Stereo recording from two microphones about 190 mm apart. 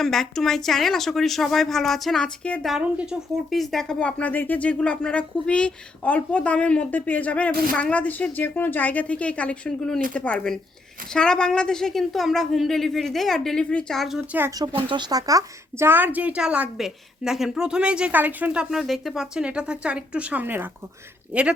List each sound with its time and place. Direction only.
0.0 s a woman's voice: centre (ahead or behind)
14.3 s speech: 15° right (ahead or behind)